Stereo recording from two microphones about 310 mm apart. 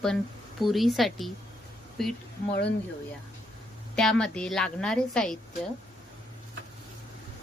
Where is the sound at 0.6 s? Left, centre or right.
Centre.